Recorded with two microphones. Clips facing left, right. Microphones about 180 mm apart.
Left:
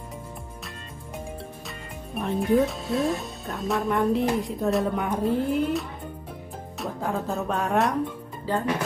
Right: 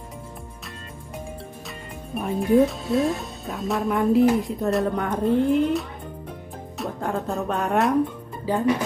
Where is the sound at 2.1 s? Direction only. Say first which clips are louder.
Right 3 dB; centre (ahead or behind).